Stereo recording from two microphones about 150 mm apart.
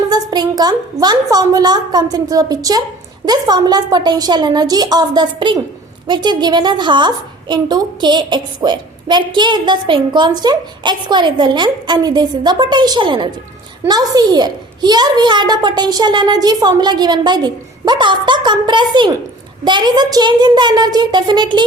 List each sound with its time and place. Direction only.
0.1 s a woman's voice: 25° right (ahead or behind)